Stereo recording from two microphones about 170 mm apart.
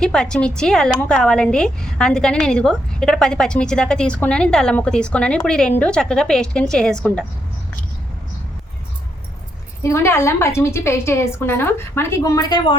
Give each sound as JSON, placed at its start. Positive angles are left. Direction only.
{"t": 0.0, "sound": "a woman's voice", "side_deg": 5}
{"t": 9.8, "sound": "a woman's voice", "side_deg": 15}